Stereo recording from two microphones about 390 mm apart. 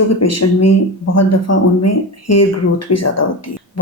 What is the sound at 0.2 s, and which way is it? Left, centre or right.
Speech, left.